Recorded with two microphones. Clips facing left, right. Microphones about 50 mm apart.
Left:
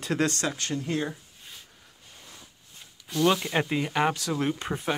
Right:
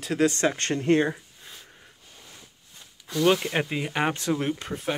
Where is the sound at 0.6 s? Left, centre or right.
Right.